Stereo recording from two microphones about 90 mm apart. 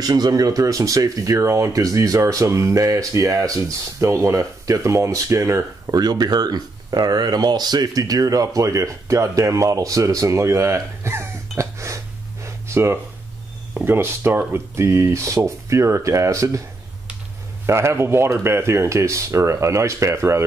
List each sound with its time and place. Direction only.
0.0 s speech: 50° right (ahead or behind)
5.9 s speech: 50° right (ahead or behind)
12.4 s a sound: 30° right (ahead or behind)
13.8 s speech: 25° right (ahead or behind)
17.6 s speech: 30° right (ahead or behind)